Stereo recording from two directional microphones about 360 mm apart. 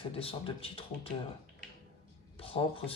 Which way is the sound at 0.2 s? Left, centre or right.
Centre.